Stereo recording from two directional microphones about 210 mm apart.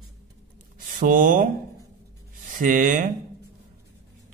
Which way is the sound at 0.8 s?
40° right (ahead or behind).